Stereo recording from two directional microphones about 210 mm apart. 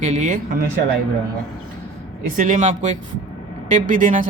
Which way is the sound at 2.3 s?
40° right (ahead or behind).